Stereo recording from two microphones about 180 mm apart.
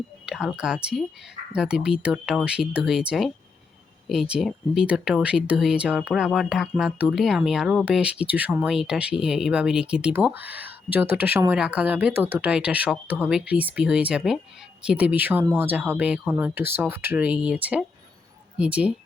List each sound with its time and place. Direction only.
0.3 s speech: 5° right (ahead or behind)